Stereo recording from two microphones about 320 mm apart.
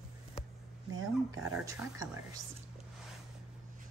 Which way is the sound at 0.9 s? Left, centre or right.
Right.